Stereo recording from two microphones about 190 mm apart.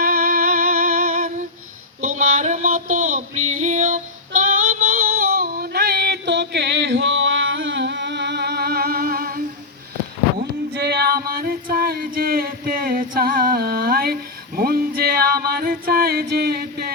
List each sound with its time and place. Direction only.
0.0 s music: 50° right (ahead or behind)
2.0 s female singing: 40° right (ahead or behind)
4.6 s a sound: 45° right (ahead or behind)
10.8 s female singing: 55° right (ahead or behind)